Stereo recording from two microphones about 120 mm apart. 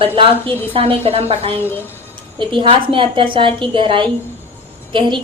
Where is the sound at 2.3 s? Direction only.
45° right (ahead or behind).